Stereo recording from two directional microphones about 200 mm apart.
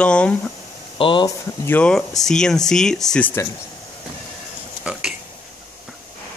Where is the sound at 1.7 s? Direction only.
5° left (ahead or behind).